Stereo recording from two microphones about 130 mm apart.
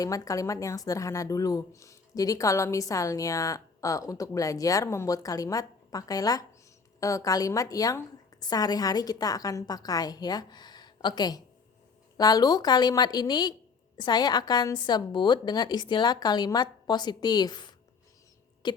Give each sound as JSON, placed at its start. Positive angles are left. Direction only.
{"t": 0.0, "sound": "a woman's voice", "side_deg": 25}